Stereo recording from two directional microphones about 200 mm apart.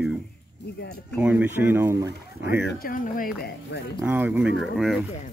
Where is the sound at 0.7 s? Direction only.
55° left (ahead or behind).